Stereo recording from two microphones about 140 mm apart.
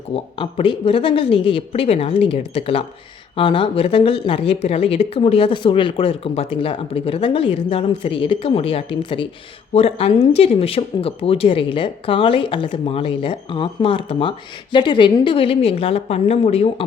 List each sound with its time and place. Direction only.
0.1 s speech: 40° left (ahead or behind)